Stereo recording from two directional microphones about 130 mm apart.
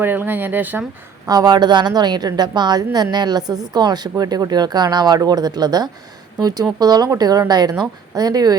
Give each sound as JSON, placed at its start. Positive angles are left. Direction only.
{"t": 0.0, "sound": "speech", "side_deg": -15}
{"t": 1.3, "sound": "a woman's voice", "side_deg": -30}